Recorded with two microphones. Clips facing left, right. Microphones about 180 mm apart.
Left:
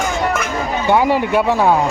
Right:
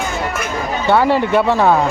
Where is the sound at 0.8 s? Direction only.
15° left (ahead or behind).